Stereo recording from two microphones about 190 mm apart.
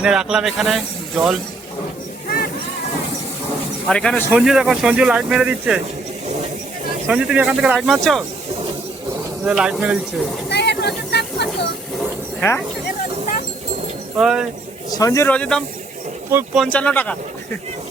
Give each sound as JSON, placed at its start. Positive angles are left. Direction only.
{"t": 0.0, "sound": "speech", "side_deg": -5}
{"t": 3.8, "sound": "speech", "side_deg": 5}
{"t": 7.1, "sound": "speech", "side_deg": -5}
{"t": 9.4, "sound": "speech", "side_deg": -5}
{"t": 10.5, "sound": "a sound", "side_deg": 60}
{"t": 12.4, "sound": "speech", "side_deg": 10}
{"t": 14.2, "sound": "speech", "side_deg": -5}
{"t": 14.8, "sound": "speech", "side_deg": 20}